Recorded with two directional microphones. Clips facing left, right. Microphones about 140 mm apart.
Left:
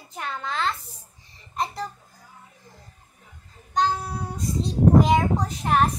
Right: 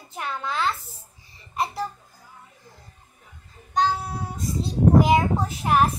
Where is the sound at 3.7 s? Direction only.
Centre (ahead or behind).